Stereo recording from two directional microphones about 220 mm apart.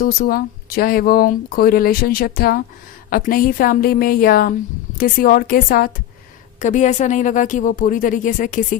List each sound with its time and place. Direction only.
0.0 s speech: 40° left (ahead or behind)